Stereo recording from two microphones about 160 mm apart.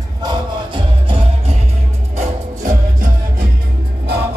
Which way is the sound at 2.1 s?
55° right (ahead or behind).